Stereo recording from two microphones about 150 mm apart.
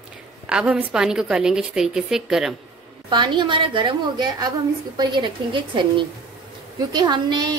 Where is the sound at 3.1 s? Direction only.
30° right (ahead or behind).